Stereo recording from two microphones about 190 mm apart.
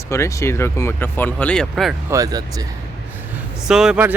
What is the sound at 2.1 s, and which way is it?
Speech, 20° right (ahead or behind).